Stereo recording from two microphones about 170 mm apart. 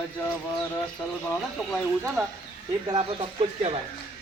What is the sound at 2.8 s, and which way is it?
Speech, 30° right (ahead or behind).